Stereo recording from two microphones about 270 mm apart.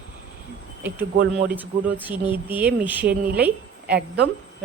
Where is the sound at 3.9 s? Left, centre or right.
Right.